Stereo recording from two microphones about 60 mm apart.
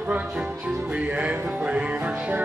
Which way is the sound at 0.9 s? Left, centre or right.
Right.